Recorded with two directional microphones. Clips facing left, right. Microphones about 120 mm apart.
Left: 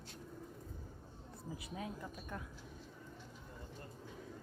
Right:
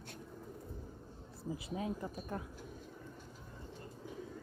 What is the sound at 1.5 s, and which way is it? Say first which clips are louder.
Speech: right 6 dB; 25° right (ahead or behind).